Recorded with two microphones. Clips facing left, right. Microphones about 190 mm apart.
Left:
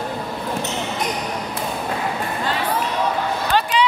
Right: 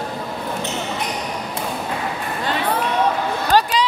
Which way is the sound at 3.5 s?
40° right (ahead or behind).